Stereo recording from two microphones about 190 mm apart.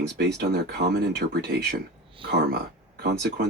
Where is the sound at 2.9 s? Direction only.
60° right (ahead or behind).